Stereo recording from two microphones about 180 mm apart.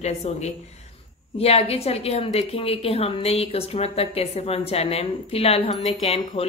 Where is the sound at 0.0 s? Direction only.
40° left (ahead or behind).